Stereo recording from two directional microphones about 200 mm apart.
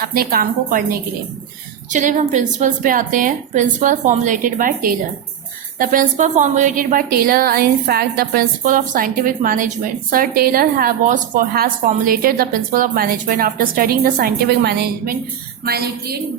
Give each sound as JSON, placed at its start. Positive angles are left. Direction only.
{"t": 0.0, "sound": "a woman's voice", "side_deg": -50}